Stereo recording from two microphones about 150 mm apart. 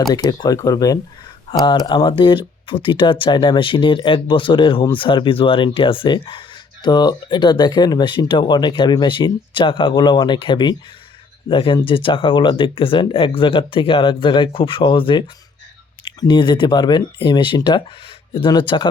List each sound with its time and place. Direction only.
0.1 s speech: 25° left (ahead or behind)
16.2 s speech: 30° left (ahead or behind)